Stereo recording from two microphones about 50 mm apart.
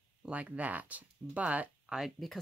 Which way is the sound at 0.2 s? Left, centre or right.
Right.